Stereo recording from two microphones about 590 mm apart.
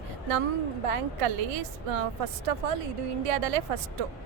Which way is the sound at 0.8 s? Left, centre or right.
Right.